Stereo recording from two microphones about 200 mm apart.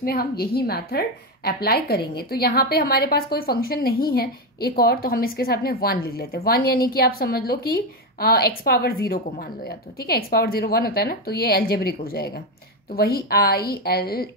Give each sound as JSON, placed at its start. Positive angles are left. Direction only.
{"t": 0.0, "sound": "a woman's voice", "side_deg": 50}